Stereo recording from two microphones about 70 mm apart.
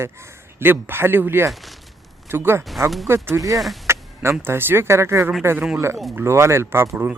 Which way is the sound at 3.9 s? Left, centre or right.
Right.